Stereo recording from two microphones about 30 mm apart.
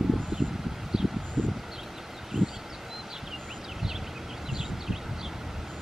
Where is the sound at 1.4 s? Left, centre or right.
Centre.